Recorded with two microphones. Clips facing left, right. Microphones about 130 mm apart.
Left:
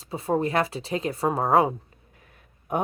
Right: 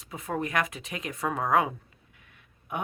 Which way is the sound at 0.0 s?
30° left (ahead or behind).